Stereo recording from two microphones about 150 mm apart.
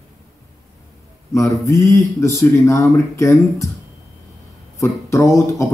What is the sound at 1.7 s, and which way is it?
Speech, 20° left (ahead or behind).